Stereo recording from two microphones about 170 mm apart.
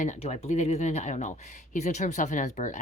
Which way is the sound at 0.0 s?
45° left (ahead or behind).